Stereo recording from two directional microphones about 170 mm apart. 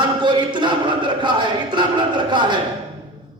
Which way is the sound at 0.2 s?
25° right (ahead or behind).